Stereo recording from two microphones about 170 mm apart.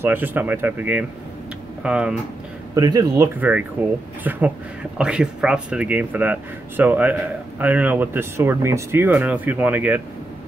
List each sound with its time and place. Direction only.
0.0 s speech: 10° right (ahead or behind)
2.7 s speech: 20° right (ahead or behind)
3.3 s speech: 10° right (ahead or behind)